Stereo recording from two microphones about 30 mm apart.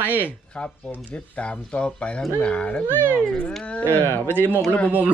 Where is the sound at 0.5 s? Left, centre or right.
Left.